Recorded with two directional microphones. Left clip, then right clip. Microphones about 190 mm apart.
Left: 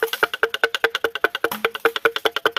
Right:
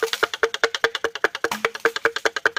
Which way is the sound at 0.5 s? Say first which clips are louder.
Left 1 dB; 35° left (ahead or behind).